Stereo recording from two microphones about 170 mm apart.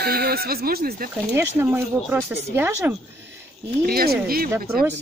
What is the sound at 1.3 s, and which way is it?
Speech, 15° right (ahead or behind).